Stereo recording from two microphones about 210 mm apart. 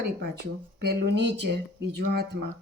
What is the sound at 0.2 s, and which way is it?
Speech, 50° right (ahead or behind).